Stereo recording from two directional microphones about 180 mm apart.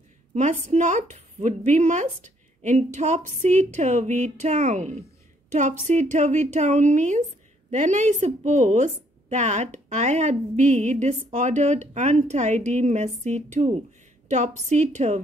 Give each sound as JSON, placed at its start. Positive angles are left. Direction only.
{"t": 0.3, "sound": "a woman's voice", "side_deg": -40}